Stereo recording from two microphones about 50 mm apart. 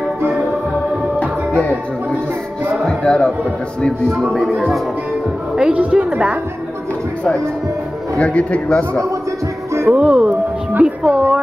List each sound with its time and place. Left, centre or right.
1.2 s music: left
3.0 s speech: centre
4.2 s speech: centre
5.6 s speech: right
8.2 s speech: left
9.9 s speech: centre